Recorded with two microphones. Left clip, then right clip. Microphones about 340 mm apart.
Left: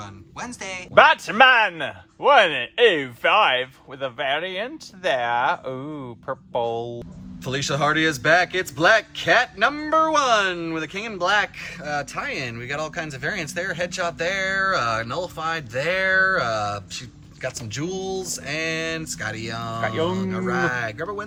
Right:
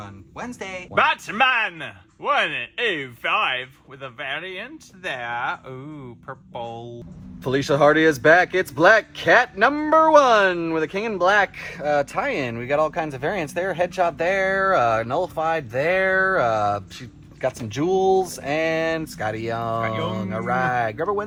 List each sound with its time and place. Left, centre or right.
0.0 s speech: centre
0.9 s speech: left
7.4 s speech: centre